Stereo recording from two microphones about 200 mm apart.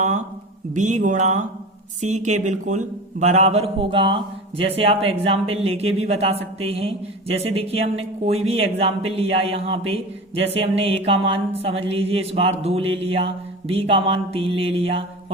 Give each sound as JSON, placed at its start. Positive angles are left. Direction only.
{"t": 0.7, "sound": "speech", "side_deg": -40}